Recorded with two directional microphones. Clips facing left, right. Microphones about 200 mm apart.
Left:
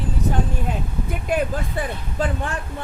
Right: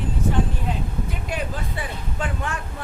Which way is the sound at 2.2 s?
35° left (ahead or behind).